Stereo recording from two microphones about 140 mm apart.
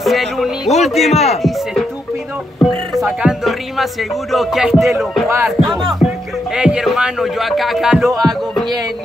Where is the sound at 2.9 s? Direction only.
Centre (ahead or behind).